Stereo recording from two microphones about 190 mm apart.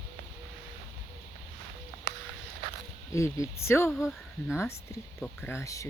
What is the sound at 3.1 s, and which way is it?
Speech, 15° left (ahead or behind).